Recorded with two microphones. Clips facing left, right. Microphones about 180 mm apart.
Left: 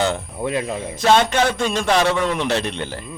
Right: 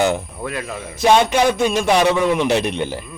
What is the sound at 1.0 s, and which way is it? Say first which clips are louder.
A man's voice: right 2 dB; 10° right (ahead or behind).